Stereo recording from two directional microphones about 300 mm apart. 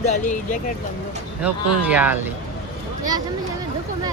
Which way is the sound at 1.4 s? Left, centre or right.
Centre.